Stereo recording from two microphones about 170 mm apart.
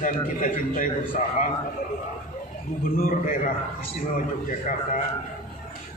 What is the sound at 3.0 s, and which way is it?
A man's voice, 50° left (ahead or behind).